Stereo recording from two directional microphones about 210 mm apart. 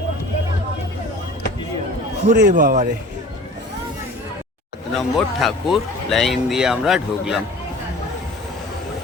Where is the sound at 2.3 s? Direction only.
40° right (ahead or behind).